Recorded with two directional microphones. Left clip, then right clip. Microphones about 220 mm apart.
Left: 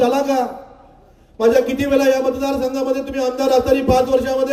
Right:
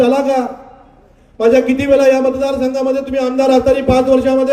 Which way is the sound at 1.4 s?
25° left (ahead or behind).